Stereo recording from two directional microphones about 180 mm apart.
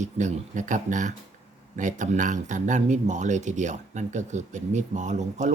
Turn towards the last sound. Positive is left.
turn(degrees=-40)  # may be behind; listen again after turning